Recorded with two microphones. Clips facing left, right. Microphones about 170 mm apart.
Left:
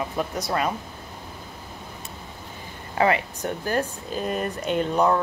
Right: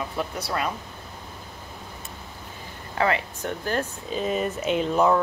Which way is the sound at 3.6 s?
10° left (ahead or behind).